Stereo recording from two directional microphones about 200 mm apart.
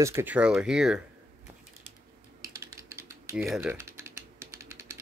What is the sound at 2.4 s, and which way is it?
Typing, 15° right (ahead or behind).